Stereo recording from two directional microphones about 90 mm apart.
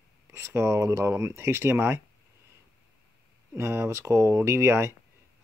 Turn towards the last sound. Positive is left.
turn(degrees=-30)  # may be behind; listen again after turning